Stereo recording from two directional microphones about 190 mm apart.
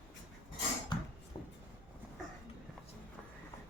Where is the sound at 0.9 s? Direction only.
20° left (ahead or behind).